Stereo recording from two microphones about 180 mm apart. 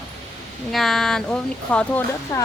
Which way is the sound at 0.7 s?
Centre (ahead or behind).